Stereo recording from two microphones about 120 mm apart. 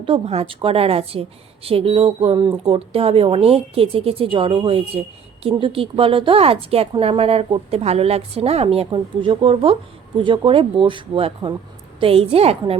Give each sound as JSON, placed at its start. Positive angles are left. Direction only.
{"t": 0.0, "sound": "a woman's voice", "side_deg": -55}